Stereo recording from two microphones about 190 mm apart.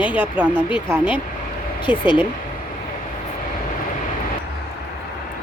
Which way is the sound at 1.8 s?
25° left (ahead or behind).